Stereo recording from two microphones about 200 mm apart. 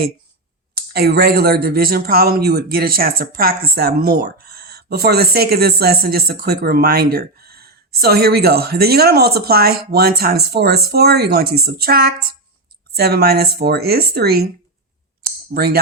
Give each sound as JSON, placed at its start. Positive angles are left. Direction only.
{"t": 0.9, "sound": "speech", "side_deg": -50}
{"t": 15.5, "sound": "speech", "side_deg": -50}